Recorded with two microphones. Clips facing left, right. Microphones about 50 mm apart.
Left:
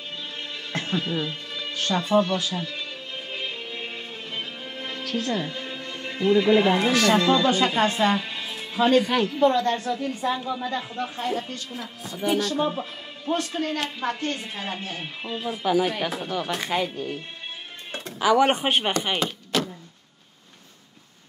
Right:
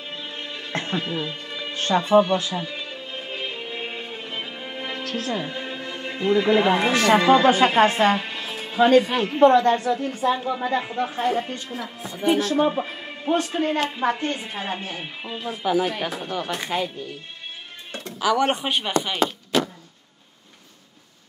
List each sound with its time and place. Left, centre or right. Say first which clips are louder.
0.1 s music: right 2 dB; centre
1.8 s a woman's voice: right 4 dB; right
2.0 s music: right 4 dB; centre
5.2 s a woman's voice: even; centre; by 8.3 s right
8.3 s music: right 2 dB; centre
9.5 s a woman's voice: right 5 dB; right; by 16.9 s centre
18.2 s speech: left 2 dB; centre
18.7 s speech: left 2 dB; left